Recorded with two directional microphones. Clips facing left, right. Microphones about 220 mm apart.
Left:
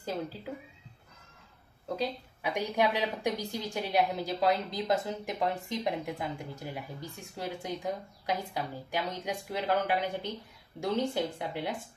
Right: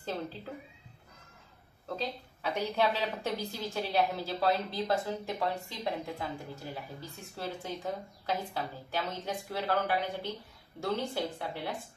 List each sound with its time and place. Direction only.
0.0 s speech: 10° left (ahead or behind)
1.9 s a woman's voice: 15° left (ahead or behind)